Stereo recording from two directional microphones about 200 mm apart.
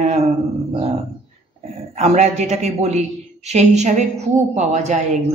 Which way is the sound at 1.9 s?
35° right (ahead or behind).